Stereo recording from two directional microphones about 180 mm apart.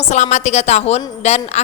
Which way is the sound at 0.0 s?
40° left (ahead or behind).